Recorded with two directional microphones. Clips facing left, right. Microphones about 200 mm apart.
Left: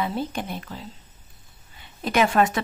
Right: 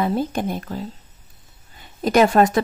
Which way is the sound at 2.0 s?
40° right (ahead or behind).